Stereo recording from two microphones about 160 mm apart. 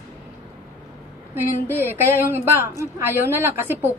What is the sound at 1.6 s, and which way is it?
A woman's voice, 15° right (ahead or behind).